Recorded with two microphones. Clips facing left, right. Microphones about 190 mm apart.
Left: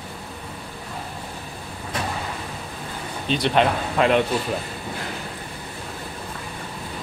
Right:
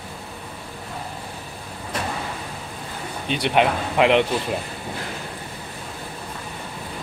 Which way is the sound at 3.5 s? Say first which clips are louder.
Right 2 dB; 15° right (ahead or behind).